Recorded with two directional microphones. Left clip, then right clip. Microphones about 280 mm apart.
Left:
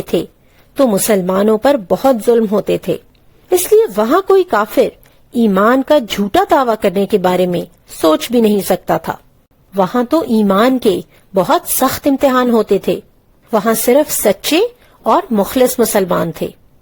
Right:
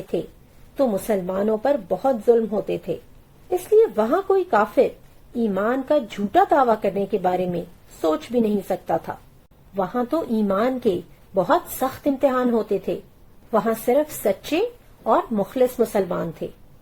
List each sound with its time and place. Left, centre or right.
0.8 s a woman's voice: left